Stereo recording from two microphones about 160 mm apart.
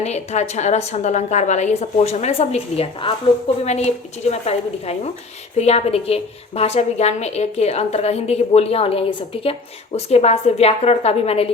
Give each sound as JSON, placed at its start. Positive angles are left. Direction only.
{"t": 0.0, "sound": "a woman's voice", "side_deg": 45}